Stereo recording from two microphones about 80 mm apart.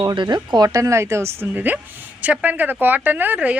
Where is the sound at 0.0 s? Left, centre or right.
Right.